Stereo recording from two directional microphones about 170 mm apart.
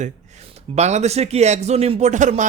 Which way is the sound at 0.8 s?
40° right (ahead or behind).